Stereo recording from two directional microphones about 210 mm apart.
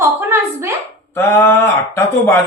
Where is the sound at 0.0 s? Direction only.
10° right (ahead or behind).